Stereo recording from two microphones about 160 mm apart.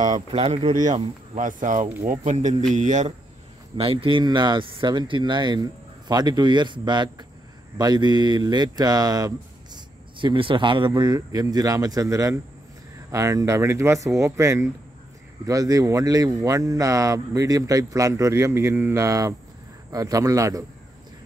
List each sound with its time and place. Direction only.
0.0 s speech: 30° right (ahead or behind)
0.7 s speech: 50° right (ahead or behind)
3.7 s speech: 35° right (ahead or behind); by 20.6 s 20° right (ahead or behind)